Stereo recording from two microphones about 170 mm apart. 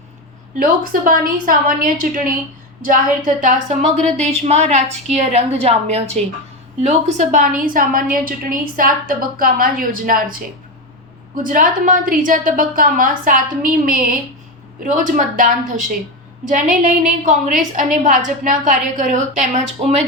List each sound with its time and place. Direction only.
0.6 s a woman's voice: 55° right (ahead or behind)
11.4 s a woman's voice: 50° right (ahead or behind)